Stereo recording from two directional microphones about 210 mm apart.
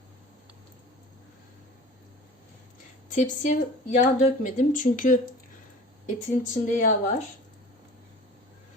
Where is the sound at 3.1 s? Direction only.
35° left (ahead or behind).